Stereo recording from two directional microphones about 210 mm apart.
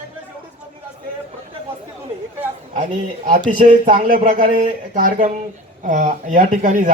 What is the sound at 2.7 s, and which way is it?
Speech, 35° right (ahead or behind).